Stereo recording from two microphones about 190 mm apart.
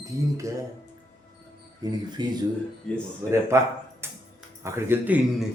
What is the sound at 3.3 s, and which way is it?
A man's voice, 15° right (ahead or behind).